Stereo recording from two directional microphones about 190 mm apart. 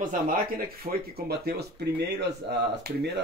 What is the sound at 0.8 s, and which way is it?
Speech, 55° right (ahead or behind).